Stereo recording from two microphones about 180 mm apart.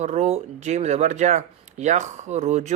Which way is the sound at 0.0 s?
40° right (ahead or behind).